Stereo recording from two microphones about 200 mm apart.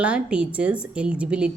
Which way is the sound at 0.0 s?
5° right (ahead or behind).